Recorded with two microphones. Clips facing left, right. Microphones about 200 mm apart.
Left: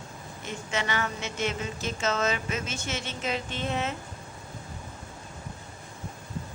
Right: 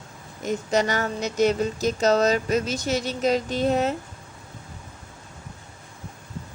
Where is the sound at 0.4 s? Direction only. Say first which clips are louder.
Right 9 dB; 40° right (ahead or behind).